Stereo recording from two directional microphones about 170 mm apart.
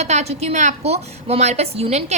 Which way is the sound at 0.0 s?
40° right (ahead or behind).